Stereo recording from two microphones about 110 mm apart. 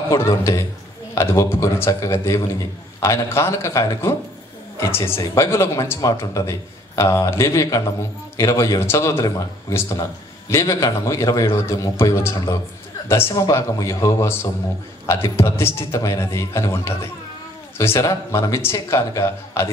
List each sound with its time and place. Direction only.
0.1 s a man's voice: 25° left (ahead or behind)